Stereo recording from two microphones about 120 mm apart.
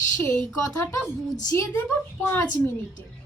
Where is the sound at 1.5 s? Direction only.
20° left (ahead or behind).